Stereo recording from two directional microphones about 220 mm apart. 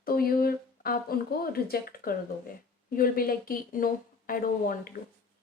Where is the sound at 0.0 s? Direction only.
40° left (ahead or behind).